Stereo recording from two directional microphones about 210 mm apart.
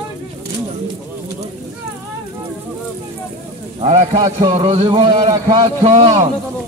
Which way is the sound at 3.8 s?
30° right (ahead or behind).